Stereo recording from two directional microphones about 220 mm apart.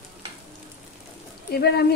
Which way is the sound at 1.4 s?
45° left (ahead or behind).